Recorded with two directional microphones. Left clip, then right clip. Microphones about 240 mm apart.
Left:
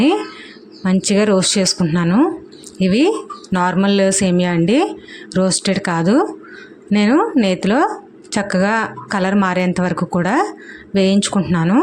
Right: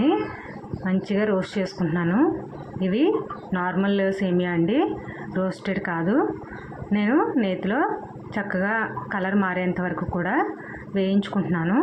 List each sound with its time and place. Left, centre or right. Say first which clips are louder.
0.9 s a woman's voice: left 9 dB; left